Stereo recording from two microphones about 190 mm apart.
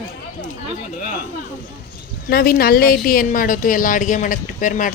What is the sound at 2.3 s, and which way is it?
Speech, 50° left (ahead or behind).